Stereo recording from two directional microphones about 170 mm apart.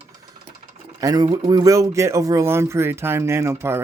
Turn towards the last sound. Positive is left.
turn(degrees=-15)  # may be behind; listen again after turning